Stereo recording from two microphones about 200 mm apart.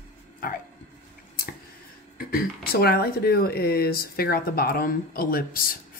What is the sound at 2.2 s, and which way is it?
Speech, 50° left (ahead or behind).